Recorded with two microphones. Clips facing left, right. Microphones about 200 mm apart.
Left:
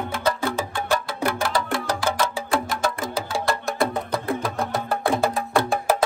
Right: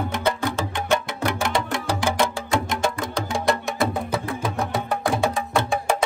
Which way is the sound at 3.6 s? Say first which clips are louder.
Even; centre (ahead or behind).